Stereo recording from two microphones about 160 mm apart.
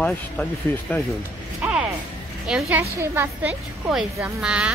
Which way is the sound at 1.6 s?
10° right (ahead or behind).